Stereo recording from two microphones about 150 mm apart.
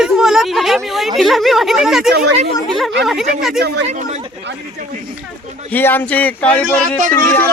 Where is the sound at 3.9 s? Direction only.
50° right (ahead or behind).